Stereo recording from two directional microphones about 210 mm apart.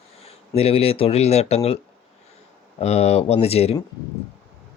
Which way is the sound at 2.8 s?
30° left (ahead or behind).